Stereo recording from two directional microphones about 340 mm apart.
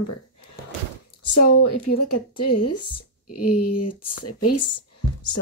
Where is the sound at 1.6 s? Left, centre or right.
Left.